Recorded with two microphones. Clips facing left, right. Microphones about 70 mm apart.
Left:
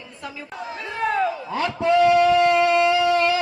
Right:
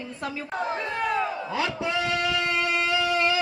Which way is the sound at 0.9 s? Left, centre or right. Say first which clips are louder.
Left 5 dB; left.